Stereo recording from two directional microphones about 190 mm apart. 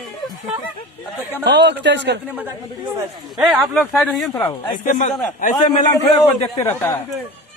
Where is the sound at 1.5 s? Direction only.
65° right (ahead or behind).